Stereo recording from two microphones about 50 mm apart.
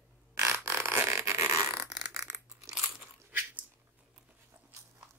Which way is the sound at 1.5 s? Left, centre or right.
Right.